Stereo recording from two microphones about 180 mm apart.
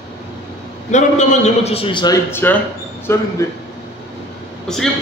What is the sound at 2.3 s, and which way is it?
Speech, 10° left (ahead or behind).